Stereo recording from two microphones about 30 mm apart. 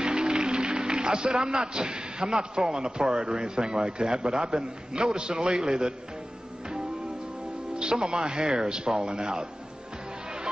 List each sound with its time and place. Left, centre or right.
0.0 s a man's voice: right
7.7 s speech: right